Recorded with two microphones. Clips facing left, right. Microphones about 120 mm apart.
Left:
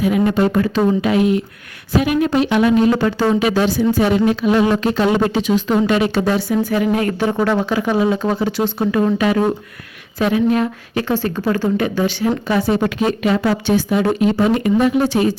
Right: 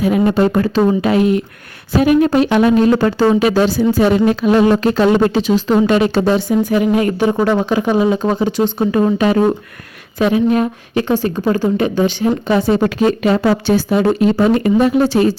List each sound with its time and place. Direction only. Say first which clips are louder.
0.3 s speech: right 2 dB; 35° right (ahead or behind); by 8.7 s 20° right (ahead or behind)
9.1 s speech: right 3 dB; 35° right (ahead or behind)
10.2 s speech: right 2 dB; 20° right (ahead or behind)
11.1 s speech: right 2 dB; 15° right (ahead or behind)
12.8 s speech: right 4 dB; 35° right (ahead or behind)